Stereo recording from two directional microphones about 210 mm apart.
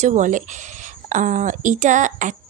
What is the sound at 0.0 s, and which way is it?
Speech, 35° right (ahead or behind).